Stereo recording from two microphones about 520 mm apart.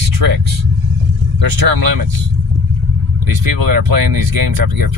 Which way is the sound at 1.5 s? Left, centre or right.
Right.